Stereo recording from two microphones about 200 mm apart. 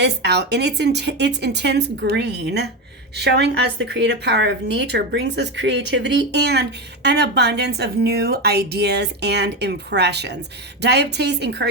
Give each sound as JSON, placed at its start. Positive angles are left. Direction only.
{"t": 0.0, "sound": "a woman's voice", "side_deg": -55}